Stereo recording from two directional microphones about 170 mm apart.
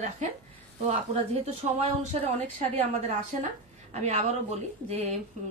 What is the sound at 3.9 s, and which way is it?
Speech, 40° right (ahead or behind).